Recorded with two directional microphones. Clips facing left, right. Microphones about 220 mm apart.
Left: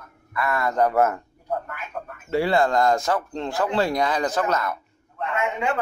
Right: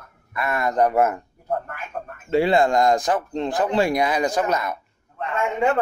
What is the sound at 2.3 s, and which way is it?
Speech, 20° right (ahead or behind).